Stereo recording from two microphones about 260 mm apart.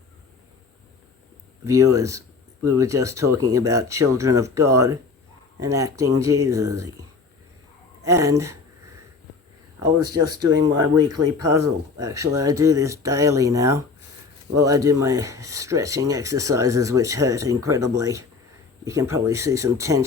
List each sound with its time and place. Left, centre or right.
1.6 s speech: centre
8.0 s speech: centre
10.2 s speech: right
10.5 s speech: centre
11.1 s speech: right
11.5 s speech: centre